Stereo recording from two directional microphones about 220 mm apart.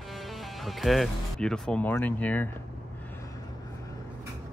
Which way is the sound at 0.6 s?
Centre (ahead or behind).